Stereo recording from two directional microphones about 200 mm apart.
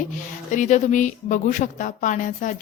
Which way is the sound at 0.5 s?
40° left (ahead or behind).